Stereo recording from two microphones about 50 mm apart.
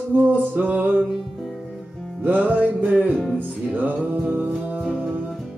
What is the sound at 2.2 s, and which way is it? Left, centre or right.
Music, right.